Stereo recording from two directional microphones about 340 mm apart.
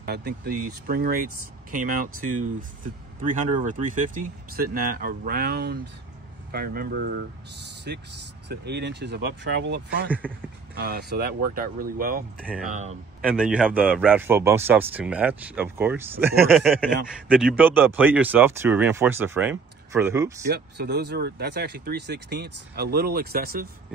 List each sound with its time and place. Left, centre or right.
0.0 s speech: right
13.2 s a man's voice: centre
20.4 s speech: right